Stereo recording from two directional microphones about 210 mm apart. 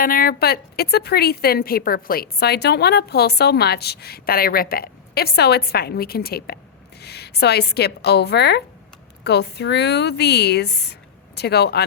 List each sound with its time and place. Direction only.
0.0 s a woman's voice: 45° left (ahead or behind)